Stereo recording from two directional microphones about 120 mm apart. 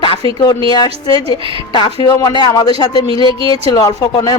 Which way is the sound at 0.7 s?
35° left (ahead or behind).